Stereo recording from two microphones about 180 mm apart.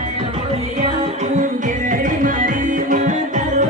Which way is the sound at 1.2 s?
45° right (ahead or behind).